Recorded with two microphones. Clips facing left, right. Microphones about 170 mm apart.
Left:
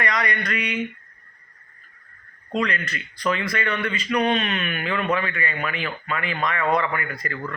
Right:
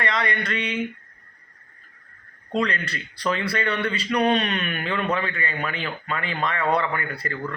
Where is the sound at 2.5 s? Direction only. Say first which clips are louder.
Even; 30° right (ahead or behind).